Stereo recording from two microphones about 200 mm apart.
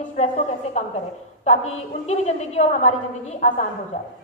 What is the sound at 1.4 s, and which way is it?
A woman's voice, 30° left (ahead or behind).